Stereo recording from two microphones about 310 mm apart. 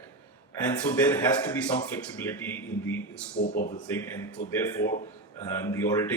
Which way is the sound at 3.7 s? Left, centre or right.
Centre.